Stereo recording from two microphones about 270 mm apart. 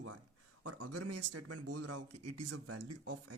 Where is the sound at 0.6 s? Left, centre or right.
Right.